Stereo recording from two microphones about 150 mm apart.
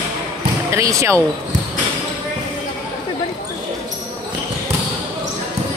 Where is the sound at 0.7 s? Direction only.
20° right (ahead or behind).